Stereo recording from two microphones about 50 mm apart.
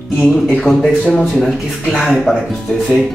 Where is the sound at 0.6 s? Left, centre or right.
Centre.